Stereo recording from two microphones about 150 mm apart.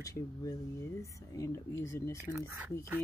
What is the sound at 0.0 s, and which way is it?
Speech, 25° left (ahead or behind).